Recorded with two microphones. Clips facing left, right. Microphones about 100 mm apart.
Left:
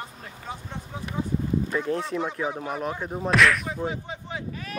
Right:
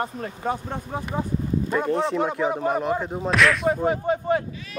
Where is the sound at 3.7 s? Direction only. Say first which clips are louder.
Right 9 dB; 55° right (ahead or behind).